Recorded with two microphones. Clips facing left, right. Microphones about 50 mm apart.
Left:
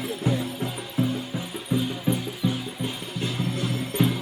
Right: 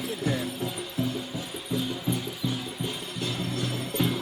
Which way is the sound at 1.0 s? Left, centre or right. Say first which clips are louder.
Left 5 dB; left.